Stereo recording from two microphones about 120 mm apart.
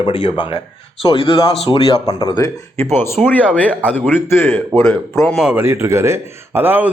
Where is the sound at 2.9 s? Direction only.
20° left (ahead or behind).